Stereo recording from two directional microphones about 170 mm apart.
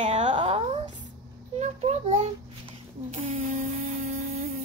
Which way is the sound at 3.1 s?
40° right (ahead or behind).